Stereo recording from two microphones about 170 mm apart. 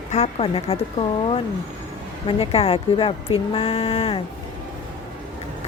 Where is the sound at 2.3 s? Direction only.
35° left (ahead or behind).